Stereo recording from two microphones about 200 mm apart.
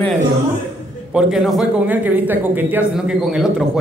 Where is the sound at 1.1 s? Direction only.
5° right (ahead or behind).